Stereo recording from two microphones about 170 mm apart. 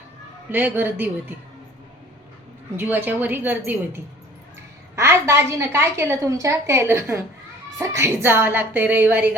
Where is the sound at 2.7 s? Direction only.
10° right (ahead or behind).